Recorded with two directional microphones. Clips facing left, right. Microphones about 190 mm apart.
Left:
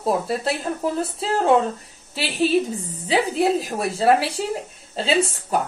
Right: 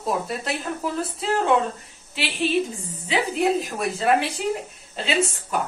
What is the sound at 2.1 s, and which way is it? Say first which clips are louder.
A woman's voice: left 3 dB; 40° left (ahead or behind).